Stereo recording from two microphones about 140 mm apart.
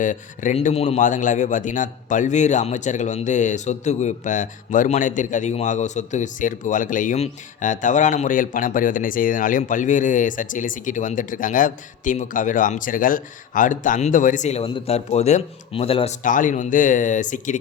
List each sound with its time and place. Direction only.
0.0 s a man's voice: 65° left (ahead or behind)
0.6 s a man's voice: 50° left (ahead or behind)
14.6 s speech: 45° left (ahead or behind)
16.2 s a man's voice: 70° left (ahead or behind)